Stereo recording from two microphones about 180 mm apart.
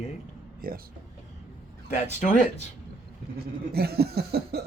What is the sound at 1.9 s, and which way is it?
Speech, 40° left (ahead or behind).